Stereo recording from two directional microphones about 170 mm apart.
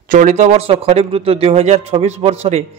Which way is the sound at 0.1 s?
45° right (ahead or behind).